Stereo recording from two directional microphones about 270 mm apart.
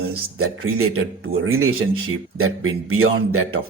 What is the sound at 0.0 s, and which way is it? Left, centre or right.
Speech, right.